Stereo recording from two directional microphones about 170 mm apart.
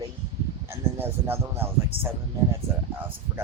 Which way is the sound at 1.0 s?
15° right (ahead or behind).